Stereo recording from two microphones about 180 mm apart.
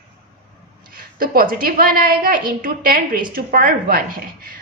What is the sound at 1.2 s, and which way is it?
A woman's voice, 50° right (ahead or behind).